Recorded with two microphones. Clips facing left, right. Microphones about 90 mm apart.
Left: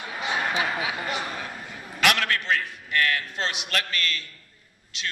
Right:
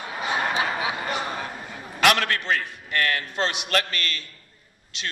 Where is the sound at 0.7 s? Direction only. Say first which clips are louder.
Right 2 dB; 25° right (ahead or behind).